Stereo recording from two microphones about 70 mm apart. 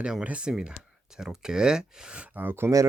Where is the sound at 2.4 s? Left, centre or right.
Right.